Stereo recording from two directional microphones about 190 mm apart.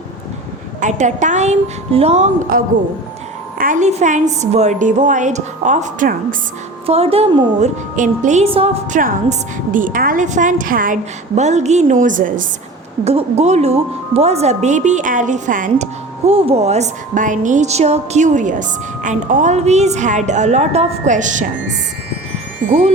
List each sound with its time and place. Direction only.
0.8 s a woman's voice: 40° right (ahead or behind)
6.8 s a woman's voice: 30° right (ahead or behind)
9.7 s a woman's voice: 45° right (ahead or behind)
13.1 s a woman's voice: 35° right (ahead or behind)